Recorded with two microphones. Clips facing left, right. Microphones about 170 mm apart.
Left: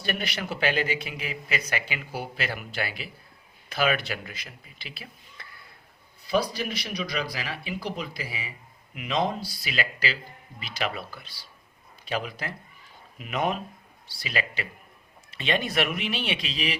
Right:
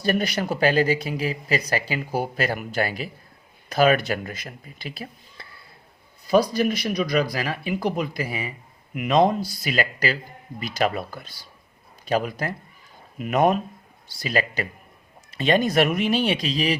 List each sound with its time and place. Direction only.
0.0 s speech: 40° right (ahead or behind)
5.4 s a sound: 30° right (ahead or behind)
6.2 s speech: 45° right (ahead or behind)